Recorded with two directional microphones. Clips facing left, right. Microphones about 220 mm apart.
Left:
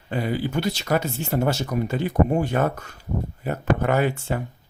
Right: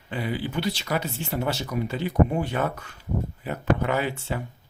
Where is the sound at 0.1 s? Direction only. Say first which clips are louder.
Left 4 dB; 45° left (ahead or behind).